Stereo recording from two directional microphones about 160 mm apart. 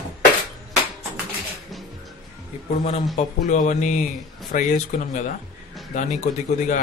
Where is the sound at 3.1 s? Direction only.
50° left (ahead or behind).